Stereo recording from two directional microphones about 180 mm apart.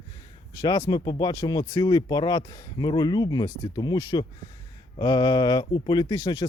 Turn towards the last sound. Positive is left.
turn(degrees=25)  # may be behind; listen again after turning